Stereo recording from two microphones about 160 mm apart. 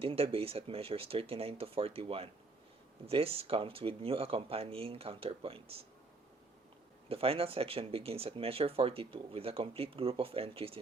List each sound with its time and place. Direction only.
0.0 s speech: 35° right (ahead or behind)
7.1 s speech: 35° right (ahead or behind)